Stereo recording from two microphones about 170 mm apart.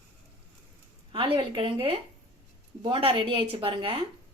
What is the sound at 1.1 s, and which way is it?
Speech, 30° right (ahead or behind).